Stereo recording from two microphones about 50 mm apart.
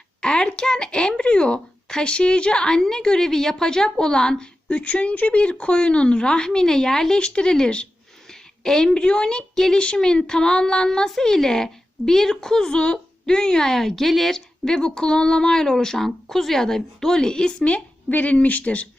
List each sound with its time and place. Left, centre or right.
0.2 s a woman's voice: centre